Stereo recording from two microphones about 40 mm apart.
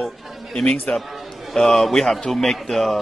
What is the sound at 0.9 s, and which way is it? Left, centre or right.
Speech, left.